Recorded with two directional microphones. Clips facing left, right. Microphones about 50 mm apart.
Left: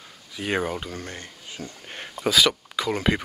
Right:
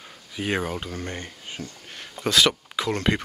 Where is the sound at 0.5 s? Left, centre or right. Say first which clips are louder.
Left 1 dB; centre.